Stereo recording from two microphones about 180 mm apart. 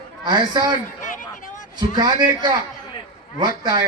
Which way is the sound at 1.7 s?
20° right (ahead or behind).